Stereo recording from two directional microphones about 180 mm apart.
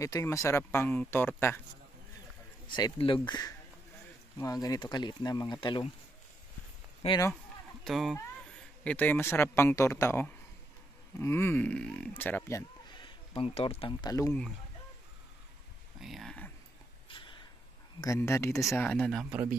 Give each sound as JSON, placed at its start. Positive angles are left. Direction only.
{"t": 0.0, "sound": "speech", "side_deg": 15}
{"t": 2.7, "sound": "speech", "side_deg": 25}
{"t": 7.0, "sound": "speech", "side_deg": 35}
{"t": 7.8, "sound": "speech", "side_deg": 0}
{"t": 13.0, "sound": "speech", "side_deg": 30}
{"t": 16.0, "sound": "a sound", "side_deg": 0}
{"t": 17.1, "sound": "a sound", "side_deg": 30}
{"t": 18.0, "sound": "speech", "side_deg": 15}
{"t": 18.9, "sound": "speech", "side_deg": 0}